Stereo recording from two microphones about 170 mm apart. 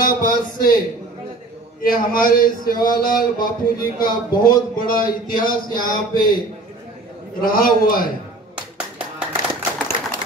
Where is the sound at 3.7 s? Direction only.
25° left (ahead or behind).